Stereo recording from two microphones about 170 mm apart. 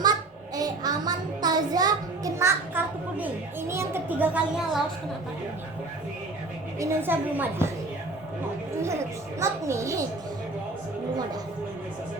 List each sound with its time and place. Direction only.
0.0 s child singing: 25° right (ahead or behind); by 4.8 s 5° right (ahead or behind)
6.7 s a woman's voice: 15° right (ahead or behind)
9.4 s a woman's voice: 15° right (ahead or behind)